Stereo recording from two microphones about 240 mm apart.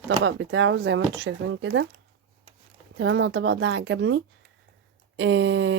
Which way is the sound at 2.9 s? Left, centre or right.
Right.